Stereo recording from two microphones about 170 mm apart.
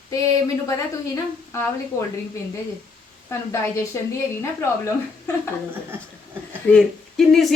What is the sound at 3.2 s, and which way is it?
Speech, 15° left (ahead or behind).